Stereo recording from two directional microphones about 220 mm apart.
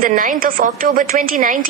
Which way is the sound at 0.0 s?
40° right (ahead or behind).